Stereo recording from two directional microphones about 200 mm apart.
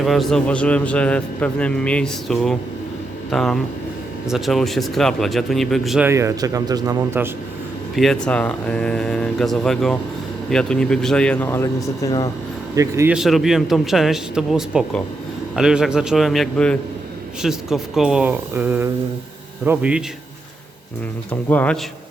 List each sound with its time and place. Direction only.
0.0 s a man's voice: centre (ahead or behind)
6.1 s speech: 15° right (ahead or behind)
7.9 s a man's voice: centre (ahead or behind)
12.7 s speech: 15° right (ahead or behind)
13.1 s a man's voice: centre (ahead or behind)
21.5 s speech: 5° left (ahead or behind)